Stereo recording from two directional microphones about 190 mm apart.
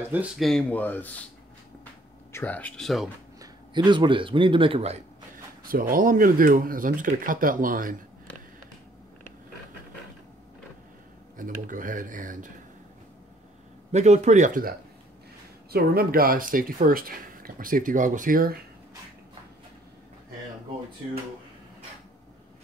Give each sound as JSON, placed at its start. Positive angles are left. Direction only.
{"t": 0.1, "sound": "speech", "side_deg": -5}
{"t": 2.3, "sound": "speech", "side_deg": 10}
{"t": 3.3, "sound": "speech", "side_deg": -25}
{"t": 5.6, "sound": "speech", "side_deg": -50}
{"t": 11.3, "sound": "speech", "side_deg": -45}
{"t": 13.9, "sound": "speech", "side_deg": -35}